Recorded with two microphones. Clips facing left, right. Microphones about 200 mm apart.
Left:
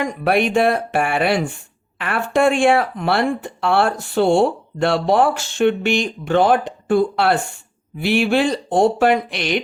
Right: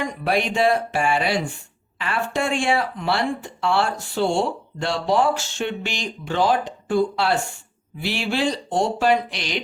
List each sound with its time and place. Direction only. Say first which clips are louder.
0.3 s speech: left 4 dB; 55° left (ahead or behind)